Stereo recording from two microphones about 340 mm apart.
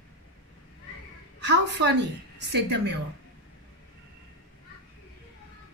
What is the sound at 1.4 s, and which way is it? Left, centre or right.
Speech, right.